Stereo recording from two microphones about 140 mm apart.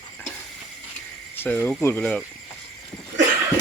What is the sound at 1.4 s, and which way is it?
Speech, 10° left (ahead or behind).